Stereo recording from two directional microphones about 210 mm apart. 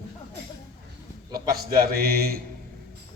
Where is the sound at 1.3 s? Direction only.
45° right (ahead or behind).